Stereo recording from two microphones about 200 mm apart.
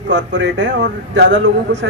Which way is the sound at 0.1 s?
60° right (ahead or behind).